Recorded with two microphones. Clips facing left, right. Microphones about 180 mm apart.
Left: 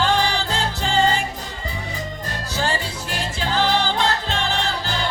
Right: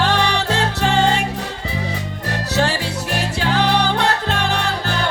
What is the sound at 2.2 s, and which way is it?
Music, 70° right (ahead or behind).